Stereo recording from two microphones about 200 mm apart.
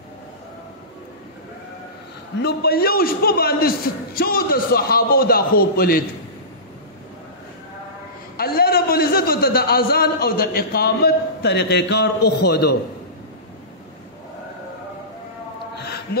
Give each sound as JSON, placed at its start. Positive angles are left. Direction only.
{"t": 2.4, "sound": "a man's voice", "side_deg": 50}
{"t": 8.4, "sound": "a man's voice", "side_deg": 50}